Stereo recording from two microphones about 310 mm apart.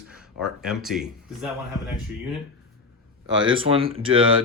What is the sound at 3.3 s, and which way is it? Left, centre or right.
Speech, centre.